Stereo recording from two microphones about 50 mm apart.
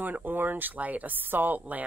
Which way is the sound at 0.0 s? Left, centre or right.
Right.